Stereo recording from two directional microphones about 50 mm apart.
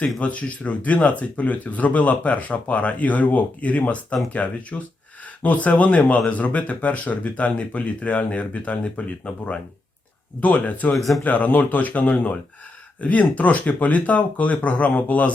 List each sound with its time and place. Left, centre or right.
0.2 s speech: left
10.9 s speech: centre
11.2 s speech: left